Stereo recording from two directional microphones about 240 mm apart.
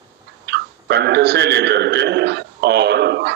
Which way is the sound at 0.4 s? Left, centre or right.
Right.